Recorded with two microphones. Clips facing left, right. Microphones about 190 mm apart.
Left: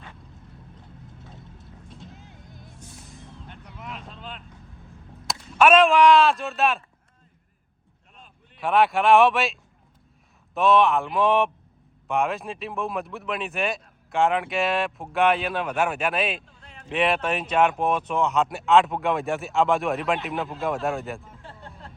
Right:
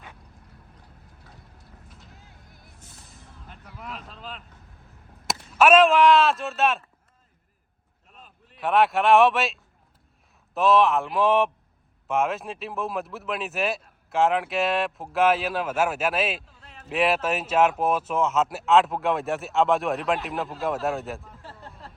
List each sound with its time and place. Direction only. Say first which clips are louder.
0.8 s vehicle: left 6 dB; 25° left (ahead or behind)
3.4 s vehicle: right 1 dB; 5° right (ahead or behind)
5.5 s speech: even; 5° right (ahead or behind)
8.1 s speech: right 1 dB; centre (ahead or behind)